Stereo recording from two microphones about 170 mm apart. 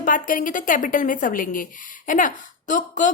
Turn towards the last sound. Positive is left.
turn(degrees=50)  # may be behind; listen again after turning